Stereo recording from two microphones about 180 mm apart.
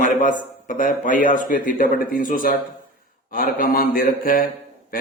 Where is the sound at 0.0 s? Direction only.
45° left (ahead or behind).